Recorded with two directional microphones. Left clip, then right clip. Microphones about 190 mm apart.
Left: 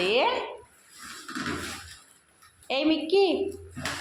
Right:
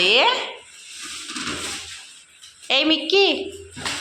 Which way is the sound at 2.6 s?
5° left (ahead or behind).